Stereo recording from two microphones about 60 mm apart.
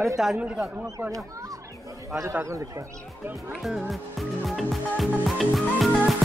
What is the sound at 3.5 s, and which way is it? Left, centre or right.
Speech, centre.